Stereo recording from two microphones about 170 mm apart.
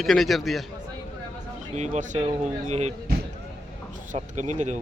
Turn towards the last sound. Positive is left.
turn(degrees=-45)  # may be behind; listen again after turning